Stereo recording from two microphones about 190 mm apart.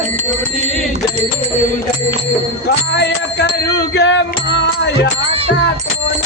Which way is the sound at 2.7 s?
60° left (ahead or behind).